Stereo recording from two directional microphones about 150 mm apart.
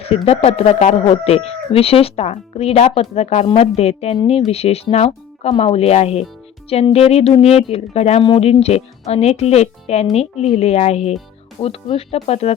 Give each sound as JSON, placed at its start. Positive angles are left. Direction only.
{"t": 0.0, "sound": "speech", "side_deg": 40}